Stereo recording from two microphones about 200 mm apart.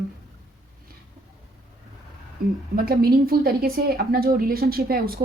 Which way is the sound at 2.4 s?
45° right (ahead or behind).